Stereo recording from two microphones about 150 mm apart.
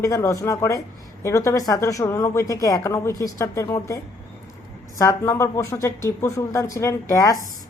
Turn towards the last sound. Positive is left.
turn(degrees=20)  # may be behind; listen again after turning